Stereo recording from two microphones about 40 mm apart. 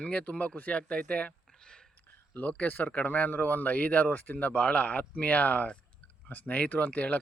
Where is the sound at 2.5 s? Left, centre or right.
Left.